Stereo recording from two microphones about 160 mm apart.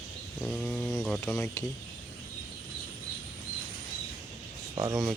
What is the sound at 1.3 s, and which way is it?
Speech, 15° left (ahead or behind).